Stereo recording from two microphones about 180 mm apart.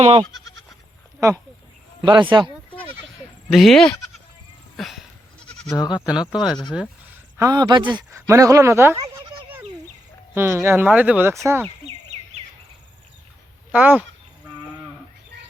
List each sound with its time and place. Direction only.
0.0 s goat: 35° right (ahead or behind)
2.0 s speech: 25° right (ahead or behind)
3.5 s speech: centre (ahead or behind)
4.8 s goat: centre (ahead or behind)
5.7 s speech: 20° left (ahead or behind)
6.1 s speech: 5° right (ahead or behind)
7.3 s speech: 20° right (ahead or behind)
10.3 s speech: 10° right (ahead or behind)
12.1 s bird: 35° right (ahead or behind)
13.7 s speech: 10° right (ahead or behind)